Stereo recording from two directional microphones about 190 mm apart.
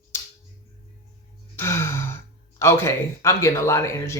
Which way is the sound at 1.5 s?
10° left (ahead or behind).